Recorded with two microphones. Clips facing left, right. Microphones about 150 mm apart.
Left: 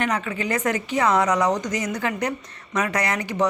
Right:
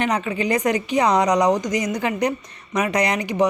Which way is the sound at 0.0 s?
20° right (ahead or behind).